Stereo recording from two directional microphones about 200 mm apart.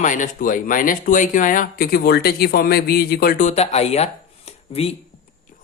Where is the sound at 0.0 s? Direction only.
40° left (ahead or behind).